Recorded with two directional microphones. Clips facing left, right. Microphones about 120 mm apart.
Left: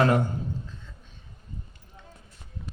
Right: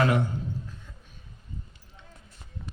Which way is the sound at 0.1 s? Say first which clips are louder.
Left 2 dB; 40° left (ahead or behind).